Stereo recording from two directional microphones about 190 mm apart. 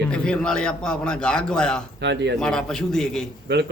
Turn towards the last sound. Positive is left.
turn(degrees=-65)  # may be behind; listen again after turning